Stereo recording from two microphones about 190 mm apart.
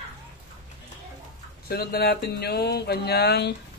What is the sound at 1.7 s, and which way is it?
Speech, 55° left (ahead or behind).